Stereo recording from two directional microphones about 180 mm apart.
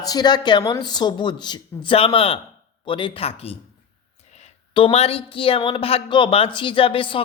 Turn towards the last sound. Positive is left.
turn(degrees=30)  # may be behind; listen again after turning